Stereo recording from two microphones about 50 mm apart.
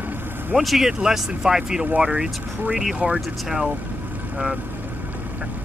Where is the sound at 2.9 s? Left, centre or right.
Right.